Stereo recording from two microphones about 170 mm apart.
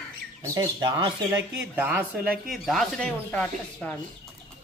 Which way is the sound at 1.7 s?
10° right (ahead or behind).